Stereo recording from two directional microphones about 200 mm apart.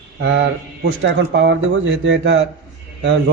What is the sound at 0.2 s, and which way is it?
Speech, 60° right (ahead or behind).